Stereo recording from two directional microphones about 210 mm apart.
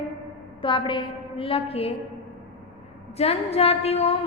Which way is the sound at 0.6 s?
25° left (ahead or behind).